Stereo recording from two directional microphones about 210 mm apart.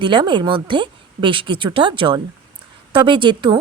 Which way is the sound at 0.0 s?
20° right (ahead or behind).